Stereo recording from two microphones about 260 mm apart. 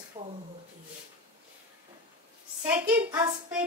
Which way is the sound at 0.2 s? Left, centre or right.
Right.